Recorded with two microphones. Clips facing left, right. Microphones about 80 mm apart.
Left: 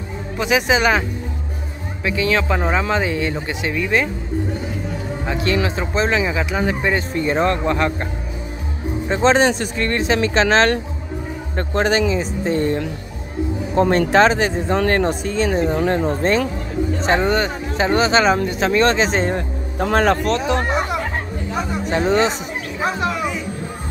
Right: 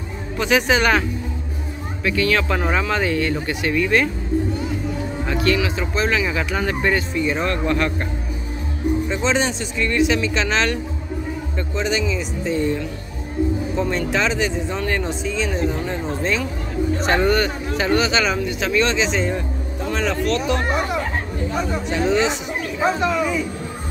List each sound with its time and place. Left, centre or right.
0.4 s speech: centre
2.0 s speech: left
5.2 s music: centre
5.5 s speech: left
6.2 s speech: centre
7.0 s speech: left
9.1 s speech: left
11.5 s speech: left
17.0 s speech: left
20.2 s speech: left
21.8 s speech: left